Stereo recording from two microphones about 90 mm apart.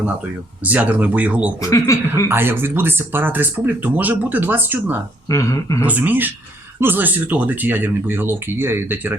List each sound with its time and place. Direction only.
0.6 s speech: 15° right (ahead or behind)
1.6 s speech: 40° left (ahead or behind)
2.3 s speech: 25° right (ahead or behind)
5.3 s speech: 40° left (ahead or behind)
5.8 s speech: 20° right (ahead or behind)